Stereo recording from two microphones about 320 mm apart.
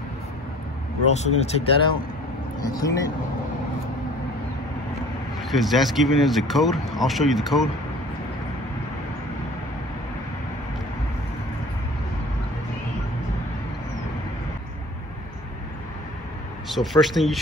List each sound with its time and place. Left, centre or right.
1.0 s speech: centre
5.4 s speech: centre
16.6 s speech: centre